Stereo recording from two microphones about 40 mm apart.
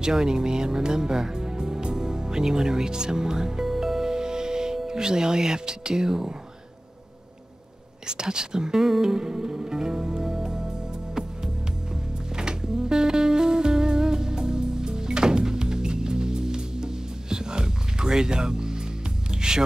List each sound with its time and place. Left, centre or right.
0.0 s speech: centre
8.1 s music: centre